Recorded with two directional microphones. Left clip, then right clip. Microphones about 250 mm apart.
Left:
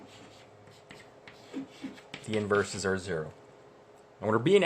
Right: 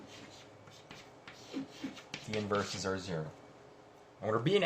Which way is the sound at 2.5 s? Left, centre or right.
Left.